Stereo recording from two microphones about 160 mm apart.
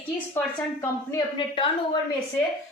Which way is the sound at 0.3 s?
15° left (ahead or behind).